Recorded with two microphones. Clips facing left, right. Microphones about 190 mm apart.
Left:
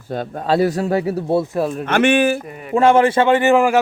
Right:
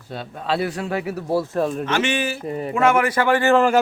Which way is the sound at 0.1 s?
45° left (ahead or behind).